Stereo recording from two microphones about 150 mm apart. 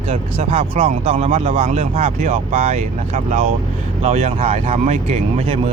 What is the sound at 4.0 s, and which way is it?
Music, 45° right (ahead or behind).